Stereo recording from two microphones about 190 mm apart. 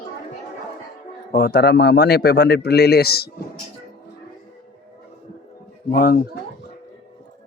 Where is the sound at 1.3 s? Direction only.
55° left (ahead or behind).